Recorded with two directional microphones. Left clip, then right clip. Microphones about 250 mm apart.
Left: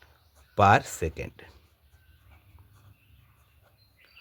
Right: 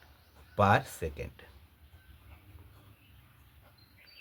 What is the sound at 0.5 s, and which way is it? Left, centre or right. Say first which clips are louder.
Speech: left 6 dB; left.